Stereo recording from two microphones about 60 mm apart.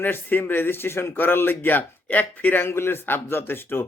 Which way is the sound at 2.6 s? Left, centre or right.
Left.